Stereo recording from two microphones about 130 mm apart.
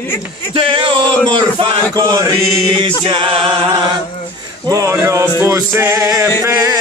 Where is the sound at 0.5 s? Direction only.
40° right (ahead or behind).